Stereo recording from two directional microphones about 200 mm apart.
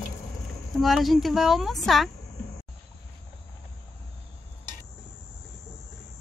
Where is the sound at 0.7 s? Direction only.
Centre (ahead or behind).